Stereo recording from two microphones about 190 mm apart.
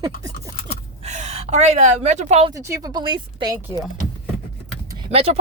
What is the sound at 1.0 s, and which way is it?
Speech, 35° right (ahead or behind).